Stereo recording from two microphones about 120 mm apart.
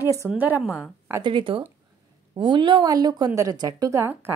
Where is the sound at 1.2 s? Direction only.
45° right (ahead or behind).